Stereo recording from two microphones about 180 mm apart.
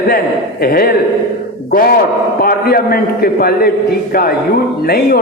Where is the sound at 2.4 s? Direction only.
55° left (ahead or behind).